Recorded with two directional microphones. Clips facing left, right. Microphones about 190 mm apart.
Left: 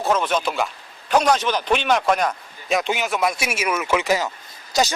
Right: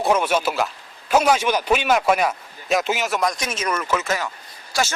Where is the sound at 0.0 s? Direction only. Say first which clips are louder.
Right 2 dB; 10° right (ahead or behind).